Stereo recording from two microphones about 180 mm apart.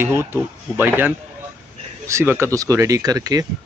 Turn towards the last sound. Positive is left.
turn(degrees=-20)  # may be behind; listen again after turning